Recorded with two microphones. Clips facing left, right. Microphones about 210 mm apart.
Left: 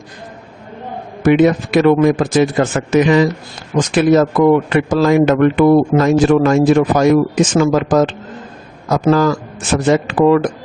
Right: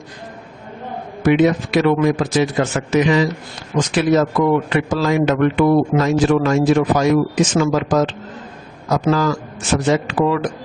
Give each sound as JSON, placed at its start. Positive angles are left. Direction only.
{"t": 1.2, "sound": "a man's voice", "side_deg": 50}